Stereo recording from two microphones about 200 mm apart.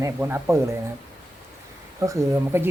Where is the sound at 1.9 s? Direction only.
15° right (ahead or behind).